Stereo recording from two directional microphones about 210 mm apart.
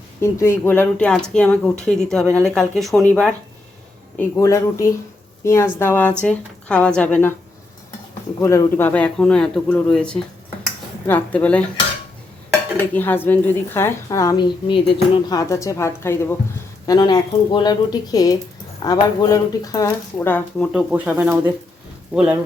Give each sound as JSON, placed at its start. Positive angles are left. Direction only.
{"t": 0.2, "sound": "speech", "side_deg": 15}
{"t": 4.2, "sound": "a woman's voice", "side_deg": 15}
{"t": 8.4, "sound": "a woman's voice", "side_deg": 10}
{"t": 12.9, "sound": "a woman's voice", "side_deg": 10}
{"t": 20.7, "sound": "speech", "side_deg": -5}